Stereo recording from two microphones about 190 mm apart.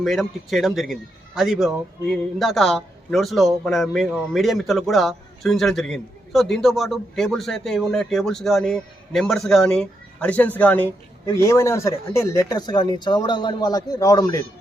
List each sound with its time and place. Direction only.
0.0 s a man's voice: centre (ahead or behind); by 14.4 s 15° left (ahead or behind)